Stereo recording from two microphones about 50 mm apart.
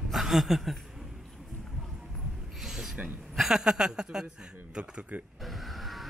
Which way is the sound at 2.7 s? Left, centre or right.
Centre.